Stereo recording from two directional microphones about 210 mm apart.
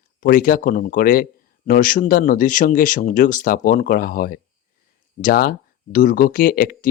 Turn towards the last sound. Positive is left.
turn(degrees=45)  # may be behind; listen again after turning